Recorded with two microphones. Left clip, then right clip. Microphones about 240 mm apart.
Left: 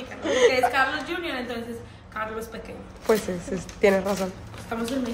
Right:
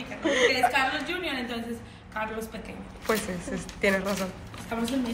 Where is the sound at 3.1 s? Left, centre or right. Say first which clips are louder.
Left 5 dB; centre.